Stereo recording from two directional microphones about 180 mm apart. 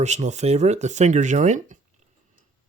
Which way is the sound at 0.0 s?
40° right (ahead or behind).